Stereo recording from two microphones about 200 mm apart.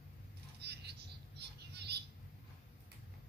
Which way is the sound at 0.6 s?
55° right (ahead or behind).